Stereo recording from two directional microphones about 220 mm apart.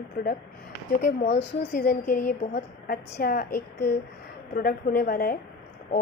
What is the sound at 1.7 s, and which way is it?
Speech, 35° left (ahead or behind).